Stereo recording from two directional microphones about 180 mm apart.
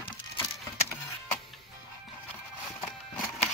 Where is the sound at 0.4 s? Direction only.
15° left (ahead or behind).